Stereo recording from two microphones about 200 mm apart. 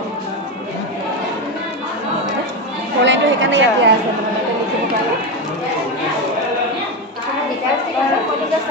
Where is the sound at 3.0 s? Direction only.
65° right (ahead or behind).